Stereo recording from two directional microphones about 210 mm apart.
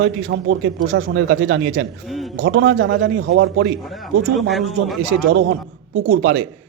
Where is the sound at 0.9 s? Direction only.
65° right (ahead or behind).